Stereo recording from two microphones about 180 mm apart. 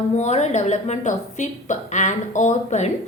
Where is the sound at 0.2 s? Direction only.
40° left (ahead or behind).